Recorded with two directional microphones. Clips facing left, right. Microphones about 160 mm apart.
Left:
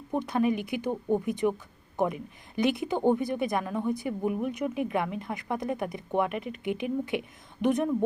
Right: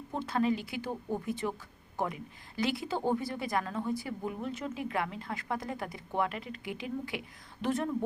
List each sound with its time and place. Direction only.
0.1 s a woman's voice: 15° left (ahead or behind)